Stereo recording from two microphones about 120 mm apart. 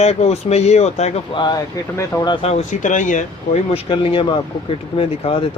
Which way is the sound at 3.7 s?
45° left (ahead or behind).